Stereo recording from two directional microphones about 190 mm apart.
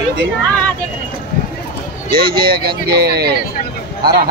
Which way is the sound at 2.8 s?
55° right (ahead or behind).